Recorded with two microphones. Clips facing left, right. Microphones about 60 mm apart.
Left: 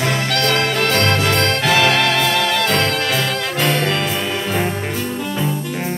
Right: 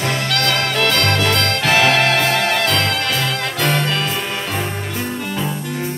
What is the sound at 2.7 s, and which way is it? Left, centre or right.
Music, left.